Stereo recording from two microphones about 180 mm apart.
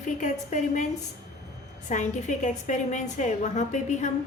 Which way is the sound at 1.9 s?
40° left (ahead or behind).